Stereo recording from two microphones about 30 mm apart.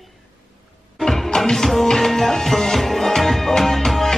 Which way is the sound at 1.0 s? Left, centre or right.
Centre.